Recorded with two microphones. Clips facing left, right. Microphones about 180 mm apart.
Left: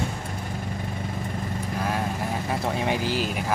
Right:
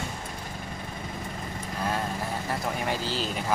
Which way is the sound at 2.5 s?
20° left (ahead or behind).